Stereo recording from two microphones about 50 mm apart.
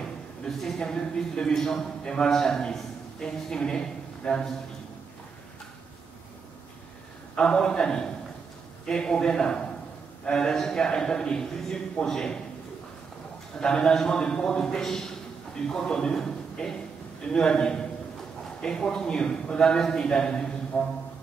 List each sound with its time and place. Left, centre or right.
0.5 s a man's voice: centre
7.3 s a man's voice: centre
13.6 s a man's voice: centre
16.2 s a sound: centre
17.2 s a man's voice: centre